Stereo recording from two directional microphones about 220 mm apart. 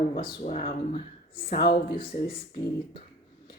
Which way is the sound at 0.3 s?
30° left (ahead or behind).